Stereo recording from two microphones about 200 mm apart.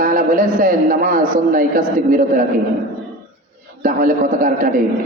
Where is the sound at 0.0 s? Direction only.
40° right (ahead or behind).